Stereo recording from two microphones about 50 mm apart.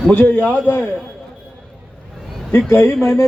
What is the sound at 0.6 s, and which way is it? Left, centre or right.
Speech, left.